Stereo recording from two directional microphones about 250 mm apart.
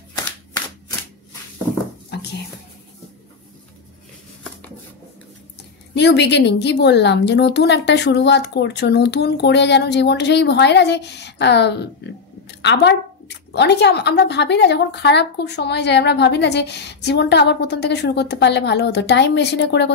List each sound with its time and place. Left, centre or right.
5.9 s a woman's voice: left
12.4 s a sound: left
13.5 s a woman's voice: left